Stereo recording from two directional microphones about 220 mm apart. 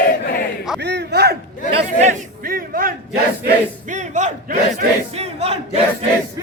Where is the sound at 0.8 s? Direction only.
50° right (ahead or behind).